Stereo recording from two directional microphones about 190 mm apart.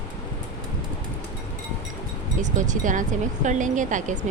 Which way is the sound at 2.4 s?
40° right (ahead or behind).